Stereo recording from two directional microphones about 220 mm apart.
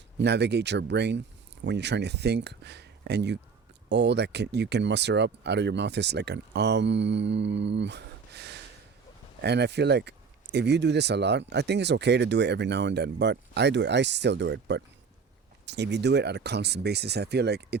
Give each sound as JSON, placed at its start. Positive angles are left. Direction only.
{"t": 0.2, "sound": "speech", "side_deg": -50}